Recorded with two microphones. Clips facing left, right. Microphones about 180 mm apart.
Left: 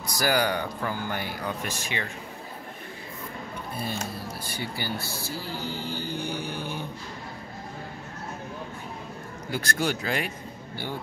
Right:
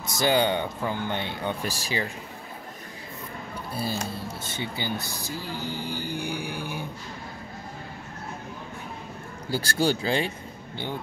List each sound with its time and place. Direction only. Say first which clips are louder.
0.0 s speech: right 2 dB; 25° right (ahead or behind)
3.7 s speech: right 3 dB; 30° right (ahead or behind); by 6.9 s 10° right (ahead or behind)
9.5 s speech: right 3 dB; 30° right (ahead or behind)